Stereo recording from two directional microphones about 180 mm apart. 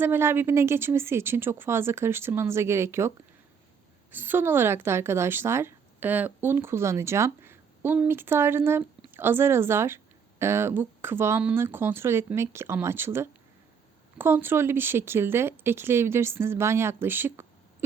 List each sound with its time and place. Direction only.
0.0 s a woman's voice: 10° right (ahead or behind)
4.1 s a woman's voice: 10° right (ahead or behind)